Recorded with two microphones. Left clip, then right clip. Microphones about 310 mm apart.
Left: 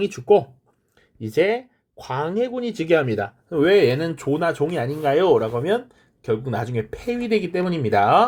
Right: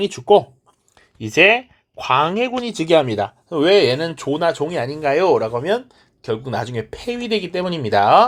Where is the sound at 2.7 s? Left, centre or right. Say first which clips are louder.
Right 5 dB; centre.